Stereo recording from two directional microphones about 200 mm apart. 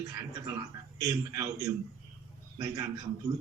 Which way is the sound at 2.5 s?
15° right (ahead or behind).